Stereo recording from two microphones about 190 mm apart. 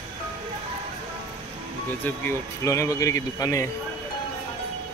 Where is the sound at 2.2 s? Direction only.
15° left (ahead or behind).